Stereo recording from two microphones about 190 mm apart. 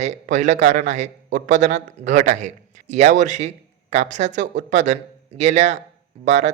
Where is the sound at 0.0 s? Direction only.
40° right (ahead or behind).